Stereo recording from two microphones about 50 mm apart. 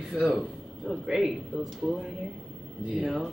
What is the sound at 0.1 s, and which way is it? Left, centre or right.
A man's voice, centre.